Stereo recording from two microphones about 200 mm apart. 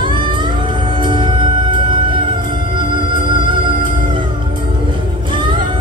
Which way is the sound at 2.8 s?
25° right (ahead or behind).